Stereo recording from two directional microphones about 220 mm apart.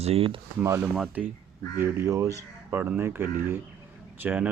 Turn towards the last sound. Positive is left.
turn(degrees=-10)  # may be behind; listen again after turning